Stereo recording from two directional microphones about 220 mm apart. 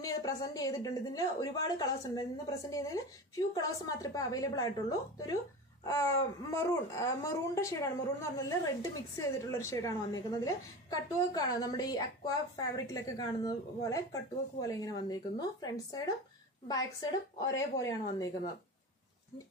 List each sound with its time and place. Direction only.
0.0 s speech: 15° left (ahead or behind)
17.5 s speech: 60° left (ahead or behind)